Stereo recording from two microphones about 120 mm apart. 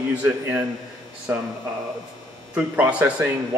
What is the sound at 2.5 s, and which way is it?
Speech, 10° right (ahead or behind).